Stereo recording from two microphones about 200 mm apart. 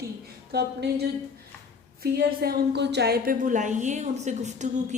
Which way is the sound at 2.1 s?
50° right (ahead or behind).